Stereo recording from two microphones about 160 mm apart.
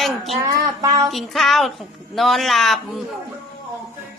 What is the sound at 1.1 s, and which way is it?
Speech, centre (ahead or behind).